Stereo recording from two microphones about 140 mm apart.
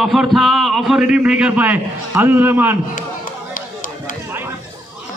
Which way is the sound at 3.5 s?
70° left (ahead or behind).